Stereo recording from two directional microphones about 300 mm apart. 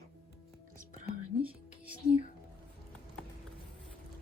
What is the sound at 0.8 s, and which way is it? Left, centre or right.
Whispering, right.